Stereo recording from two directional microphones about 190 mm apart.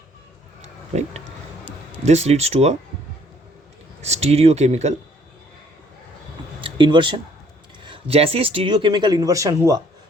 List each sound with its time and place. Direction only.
0.9 s speech: 35° right (ahead or behind)
4.0 s speech: 35° right (ahead or behind)
6.6 s a sound: 25° right (ahead or behind)
7.9 s speech: 30° right (ahead or behind)